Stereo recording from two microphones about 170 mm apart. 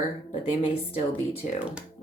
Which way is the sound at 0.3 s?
35° left (ahead or behind).